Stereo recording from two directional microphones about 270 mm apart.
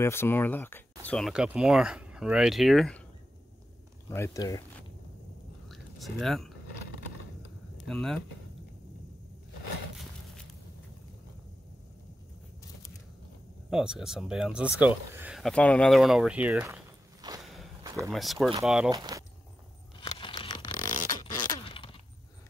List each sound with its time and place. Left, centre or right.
0.0 s speech: centre
4.1 s speech: centre
5.7 s a sound: centre
7.8 s speech: centre
13.7 s speech: centre
17.8 s a sound: centre
18.1 s speech: centre
18.9 s speech: centre
20.0 s a sound: centre